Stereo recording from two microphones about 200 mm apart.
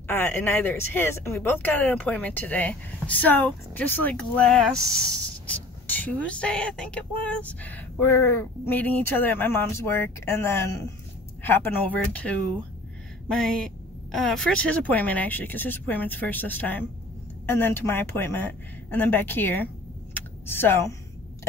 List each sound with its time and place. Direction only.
0.0 s speech: 10° left (ahead or behind)
20.2 s typing: 10° left (ahead or behind)